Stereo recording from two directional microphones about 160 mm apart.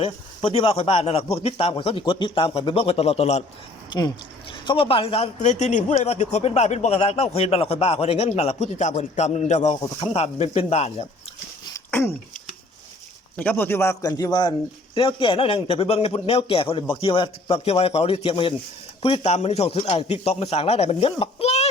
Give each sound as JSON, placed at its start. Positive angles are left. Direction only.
{"t": 0.0, "sound": "a man's voice", "side_deg": 35}
{"t": 3.8, "sound": "a man's voice", "side_deg": 25}
{"t": 11.9, "sound": "speech", "side_deg": 15}
{"t": 13.3, "sound": "a man's voice", "side_deg": 10}